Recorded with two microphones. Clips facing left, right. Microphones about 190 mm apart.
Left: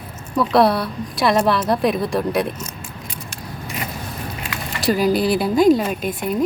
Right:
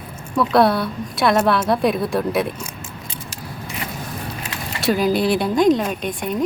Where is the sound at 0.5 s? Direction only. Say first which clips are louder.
Even; centre (ahead or behind).